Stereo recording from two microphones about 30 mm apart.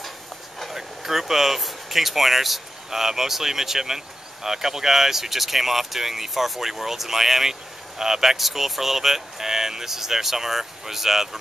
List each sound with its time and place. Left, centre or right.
0.7 s speech: centre